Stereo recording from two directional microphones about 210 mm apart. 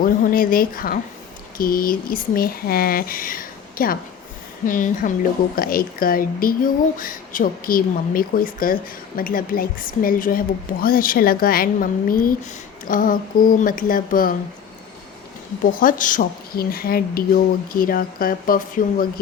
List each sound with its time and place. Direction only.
0.0 s a woman's voice: 45° left (ahead or behind)
15.6 s a woman's voice: 40° left (ahead or behind)